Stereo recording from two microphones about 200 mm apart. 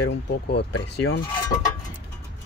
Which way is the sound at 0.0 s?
55° left (ahead or behind).